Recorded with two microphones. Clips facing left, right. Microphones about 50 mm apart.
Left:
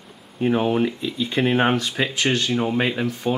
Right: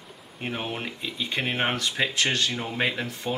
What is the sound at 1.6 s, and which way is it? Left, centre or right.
Speech, centre.